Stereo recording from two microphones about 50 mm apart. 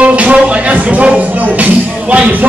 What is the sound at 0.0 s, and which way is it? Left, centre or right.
Music, right.